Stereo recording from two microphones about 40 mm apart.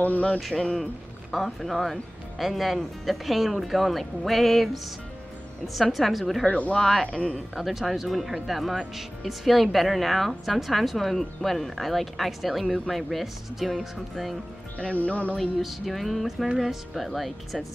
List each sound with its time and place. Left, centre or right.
0.0 s speech: left
0.5 s a woman's voice: centre
5.8 s a woman's voice: centre
6.4 s speech: left
6.8 s a woman's voice: centre
7.1 s speech: left
7.5 s a woman's voice: centre
15.0 s speech: left
15.6 s a woman's voice: centre